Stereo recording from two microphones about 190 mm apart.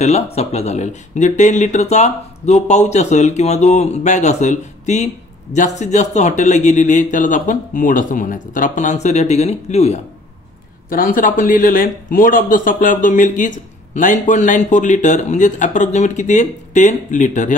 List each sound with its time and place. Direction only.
0.0 s speech: 35° left (ahead or behind)
10.9 s speech: 45° left (ahead or behind)